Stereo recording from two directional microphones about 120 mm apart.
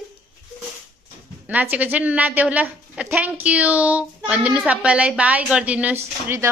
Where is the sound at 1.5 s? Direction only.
15° right (ahead or behind).